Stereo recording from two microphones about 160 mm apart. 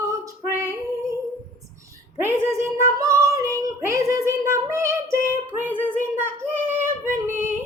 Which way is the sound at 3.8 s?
20° right (ahead or behind).